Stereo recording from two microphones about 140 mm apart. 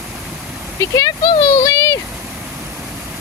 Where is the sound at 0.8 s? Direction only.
25° left (ahead or behind).